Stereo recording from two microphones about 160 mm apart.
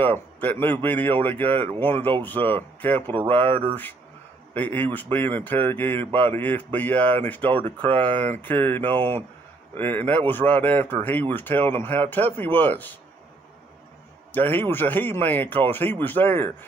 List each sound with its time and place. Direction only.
0.0 s a man's voice: 10° left (ahead or behind)
1.5 s speech: 35° right (ahead or behind)
1.8 s a man's voice: 10° left (ahead or behind)
4.7 s a man's voice: 10° left (ahead or behind)
7.5 s speech: 35° right (ahead or behind)
8.0 s a man's voice: 10° left (ahead or behind)
14.3 s a man's voice: 10° left (ahead or behind)